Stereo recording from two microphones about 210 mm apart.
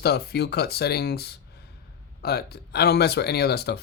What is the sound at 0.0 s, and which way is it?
Speech, 50° left (ahead or behind).